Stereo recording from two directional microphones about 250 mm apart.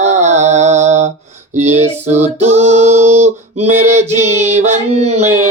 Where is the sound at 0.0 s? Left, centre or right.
Right.